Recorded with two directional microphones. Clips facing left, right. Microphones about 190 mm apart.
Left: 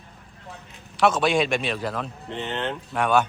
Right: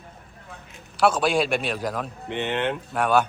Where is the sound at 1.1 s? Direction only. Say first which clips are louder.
Even; 10° right (ahead or behind).